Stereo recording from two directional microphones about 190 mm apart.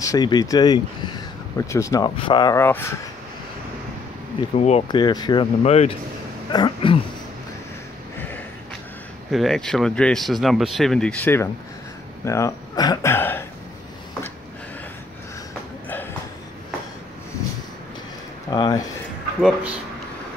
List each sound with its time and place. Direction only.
0.0 s speech: 20° left (ahead or behind)
4.4 s speech: 35° left (ahead or behind)
4.8 s speech: 20° left (ahead or behind)
6.5 s a sound: 25° left (ahead or behind)
9.3 s speech: centre (ahead or behind)
18.5 s speech: 20° left (ahead or behind)